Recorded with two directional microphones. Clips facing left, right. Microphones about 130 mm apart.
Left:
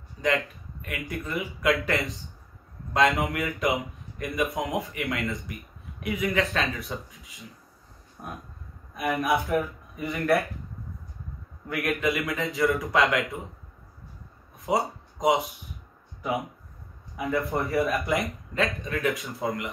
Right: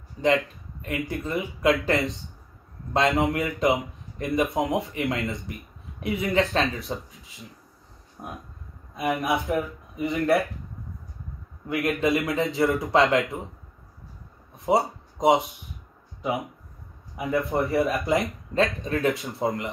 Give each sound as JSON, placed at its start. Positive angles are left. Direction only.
{"t": 0.8, "sound": "a man's voice", "side_deg": -25}
{"t": 8.2, "sound": "a sound", "side_deg": -20}
{"t": 9.2, "sound": "speech", "side_deg": -25}
{"t": 11.7, "sound": "speech", "side_deg": -25}
{"t": 14.7, "sound": "speech", "side_deg": -25}